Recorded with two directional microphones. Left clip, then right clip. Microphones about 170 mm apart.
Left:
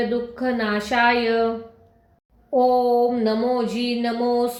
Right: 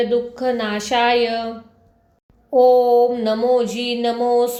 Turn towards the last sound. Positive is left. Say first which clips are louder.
# right 4 dB
turn(degrees=-35)  # may be behind; listen again after turning